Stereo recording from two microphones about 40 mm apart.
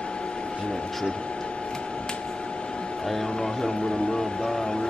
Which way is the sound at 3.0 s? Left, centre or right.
Centre.